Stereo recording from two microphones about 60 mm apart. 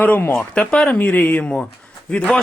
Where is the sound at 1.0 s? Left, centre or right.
Left.